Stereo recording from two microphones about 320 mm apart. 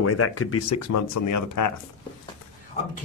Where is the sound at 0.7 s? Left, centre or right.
Left.